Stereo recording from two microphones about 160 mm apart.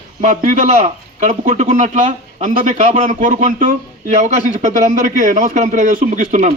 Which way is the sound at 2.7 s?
45° right (ahead or behind).